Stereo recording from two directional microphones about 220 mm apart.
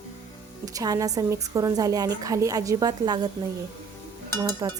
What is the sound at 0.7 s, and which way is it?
A woman's voice, 15° right (ahead or behind).